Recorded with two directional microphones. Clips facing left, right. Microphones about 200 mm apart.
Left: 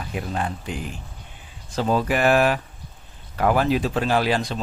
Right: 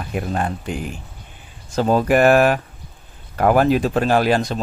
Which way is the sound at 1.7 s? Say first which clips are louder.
Right 6 dB; 45° right (ahead or behind).